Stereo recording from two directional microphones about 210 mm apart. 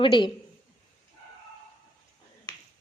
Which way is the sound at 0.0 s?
20° left (ahead or behind).